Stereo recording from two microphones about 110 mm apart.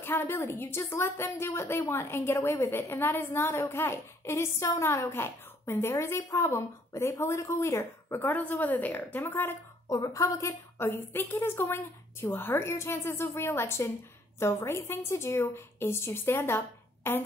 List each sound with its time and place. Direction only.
0.0 s a woman's voice: 20° left (ahead or behind)
9.8 s a woman's voice: 35° left (ahead or behind)